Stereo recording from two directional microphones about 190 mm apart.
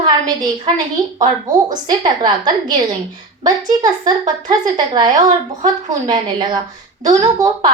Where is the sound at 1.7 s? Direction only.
20° right (ahead or behind).